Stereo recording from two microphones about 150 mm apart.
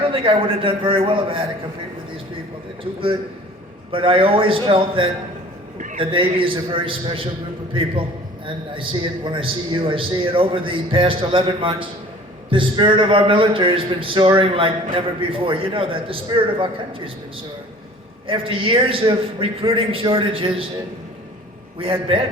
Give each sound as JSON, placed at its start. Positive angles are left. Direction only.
{"t": 0.1, "sound": "a man's voice", "side_deg": -35}
{"t": 3.9, "sound": "a man's voice", "side_deg": -35}
{"t": 18.3, "sound": "a man's voice", "side_deg": -35}
{"t": 21.8, "sound": "a man's voice", "side_deg": -35}